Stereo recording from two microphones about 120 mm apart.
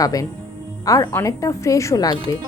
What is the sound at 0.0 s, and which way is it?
A woman's voice, 30° left (ahead or behind).